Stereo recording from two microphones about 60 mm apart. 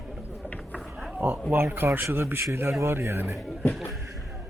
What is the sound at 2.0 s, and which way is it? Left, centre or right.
Speech, right.